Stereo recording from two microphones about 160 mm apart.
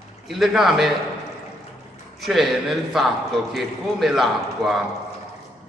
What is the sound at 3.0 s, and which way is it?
A man's voice, centre (ahead or behind).